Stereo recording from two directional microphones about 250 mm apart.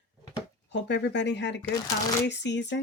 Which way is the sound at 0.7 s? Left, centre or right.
Left.